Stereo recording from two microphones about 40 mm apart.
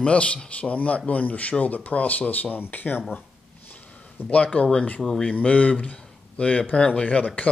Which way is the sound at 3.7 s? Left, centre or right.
Left.